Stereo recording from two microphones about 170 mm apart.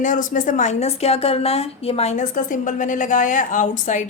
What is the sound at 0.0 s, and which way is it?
A woman's voice, 50° left (ahead or behind).